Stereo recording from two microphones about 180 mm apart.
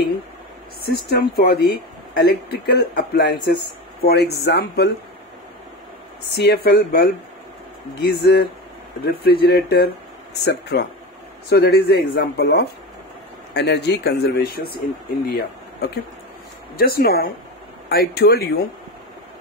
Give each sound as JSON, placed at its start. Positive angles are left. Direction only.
{"t": 0.9, "sound": "speech", "side_deg": 65}
{"t": 6.3, "sound": "speech", "side_deg": 65}